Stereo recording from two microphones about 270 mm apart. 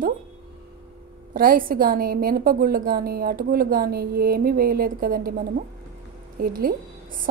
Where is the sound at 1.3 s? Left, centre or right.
Right.